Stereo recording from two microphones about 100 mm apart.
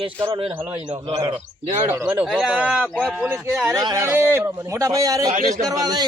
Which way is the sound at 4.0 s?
25° right (ahead or behind).